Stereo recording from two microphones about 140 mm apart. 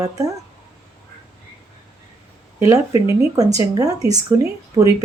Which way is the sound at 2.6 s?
20° right (ahead or behind).